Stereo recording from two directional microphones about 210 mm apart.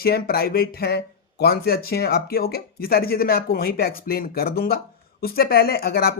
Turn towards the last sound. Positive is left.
turn(degrees=50)  # may be behind; listen again after turning